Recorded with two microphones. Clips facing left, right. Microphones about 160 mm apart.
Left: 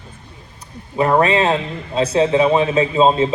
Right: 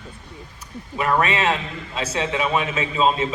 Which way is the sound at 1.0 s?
30° left (ahead or behind).